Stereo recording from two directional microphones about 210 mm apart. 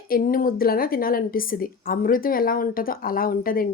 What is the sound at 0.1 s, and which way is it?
A woman's voice, 45° left (ahead or behind).